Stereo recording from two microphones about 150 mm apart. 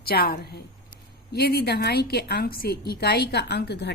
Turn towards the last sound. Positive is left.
turn(degrees=90)